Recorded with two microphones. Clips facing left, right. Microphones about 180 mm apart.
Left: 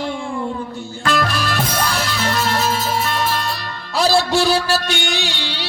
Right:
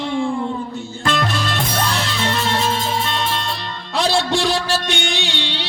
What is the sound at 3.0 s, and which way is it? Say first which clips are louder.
Music: left 2 dB; 20° right (ahead or behind).